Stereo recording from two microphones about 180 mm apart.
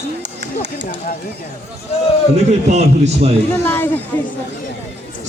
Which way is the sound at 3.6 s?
10° left (ahead or behind).